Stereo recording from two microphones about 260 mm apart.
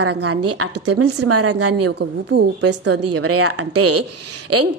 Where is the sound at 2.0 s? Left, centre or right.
Right.